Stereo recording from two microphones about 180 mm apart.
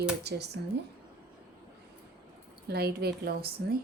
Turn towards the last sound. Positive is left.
turn(degrees=-60)  # may be behind; listen again after turning